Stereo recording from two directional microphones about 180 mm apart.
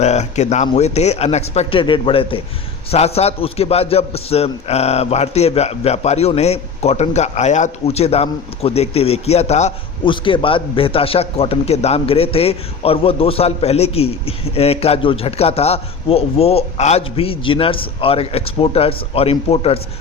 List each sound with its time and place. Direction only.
0.0 s a man's voice: 40° left (ahead or behind)